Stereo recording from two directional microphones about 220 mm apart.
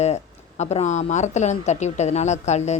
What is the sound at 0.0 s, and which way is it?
Speech, 30° left (ahead or behind).